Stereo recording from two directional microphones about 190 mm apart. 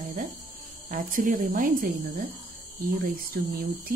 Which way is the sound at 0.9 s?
45° right (ahead or behind).